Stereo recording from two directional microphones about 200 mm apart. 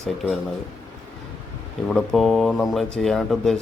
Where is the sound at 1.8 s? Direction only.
Centre (ahead or behind).